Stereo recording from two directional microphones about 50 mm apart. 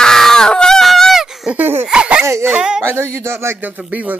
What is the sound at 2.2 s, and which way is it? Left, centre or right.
Dog, right.